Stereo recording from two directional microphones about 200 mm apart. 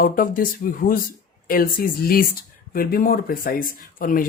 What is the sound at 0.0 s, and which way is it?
Speech, 45° left (ahead or behind).